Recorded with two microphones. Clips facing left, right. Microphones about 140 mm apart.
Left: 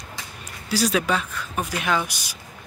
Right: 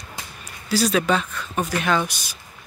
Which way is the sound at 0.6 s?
10° left (ahead or behind).